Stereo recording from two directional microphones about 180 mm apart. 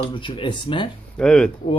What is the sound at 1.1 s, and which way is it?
Speech, 5° left (ahead or behind).